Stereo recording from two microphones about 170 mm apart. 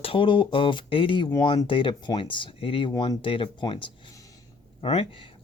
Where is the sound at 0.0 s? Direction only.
30° left (ahead or behind).